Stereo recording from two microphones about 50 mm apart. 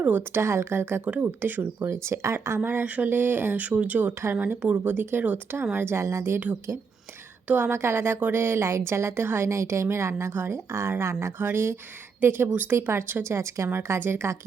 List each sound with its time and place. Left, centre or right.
0.0 s speech: right
0.3 s a woman's voice: right
1.8 s a woman's voice: right
2.8 s speech: right
3.1 s speech: right
3.6 s speech: right
5.7 s a woman's voice: right
7.5 s a woman's voice: right
9.5 s speech: right
11.3 s a woman's voice: right
13.3 s speech: right
13.7 s a woman's voice: right